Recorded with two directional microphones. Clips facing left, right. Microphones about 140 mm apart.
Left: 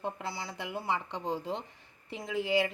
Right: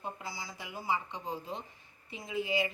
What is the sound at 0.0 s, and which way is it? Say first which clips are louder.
Speech: left 5 dB; 65° left (ahead or behind).